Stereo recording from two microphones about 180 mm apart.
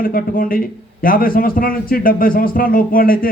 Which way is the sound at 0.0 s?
55° left (ahead or behind).